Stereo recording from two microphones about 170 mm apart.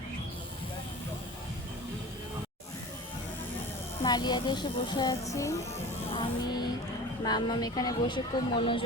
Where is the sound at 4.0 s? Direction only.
25° left (ahead or behind).